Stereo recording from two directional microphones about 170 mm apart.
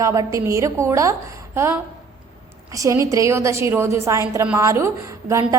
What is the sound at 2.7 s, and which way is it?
A woman's voice, 20° right (ahead or behind).